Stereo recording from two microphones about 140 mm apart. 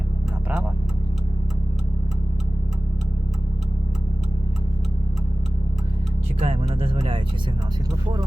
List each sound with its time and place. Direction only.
6.4 s music: 45° right (ahead or behind)